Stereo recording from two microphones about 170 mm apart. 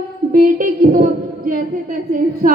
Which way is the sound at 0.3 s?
55° right (ahead or behind).